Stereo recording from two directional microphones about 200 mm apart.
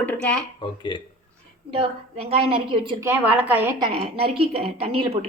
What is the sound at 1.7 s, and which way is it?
A woman's voice, 30° right (ahead or behind).